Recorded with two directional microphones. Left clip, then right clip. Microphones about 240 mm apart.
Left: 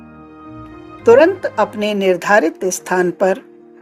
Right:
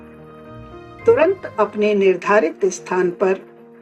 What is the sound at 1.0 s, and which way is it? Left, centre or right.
A woman's voice, left.